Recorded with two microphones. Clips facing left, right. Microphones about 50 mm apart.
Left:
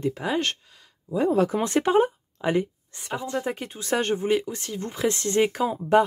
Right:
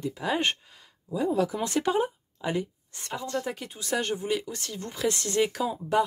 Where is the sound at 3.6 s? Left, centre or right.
Left.